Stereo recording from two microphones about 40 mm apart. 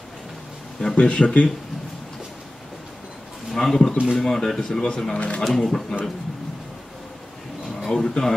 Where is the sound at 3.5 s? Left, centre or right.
Centre.